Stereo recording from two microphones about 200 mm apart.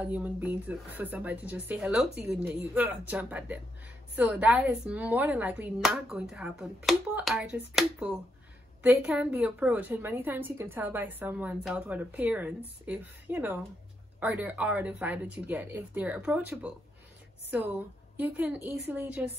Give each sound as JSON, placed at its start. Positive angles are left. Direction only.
{"t": 0.0, "sound": "a woman's voice", "side_deg": -5}
{"t": 18.1, "sound": "a woman's voice", "side_deg": -10}